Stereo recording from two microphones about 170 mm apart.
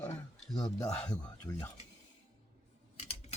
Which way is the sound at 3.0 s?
40° left (ahead or behind).